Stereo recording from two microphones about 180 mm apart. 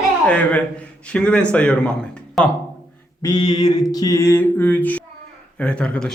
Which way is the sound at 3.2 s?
20° left (ahead or behind).